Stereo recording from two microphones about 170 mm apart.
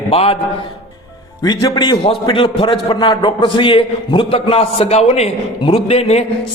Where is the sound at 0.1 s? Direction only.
35° left (ahead or behind).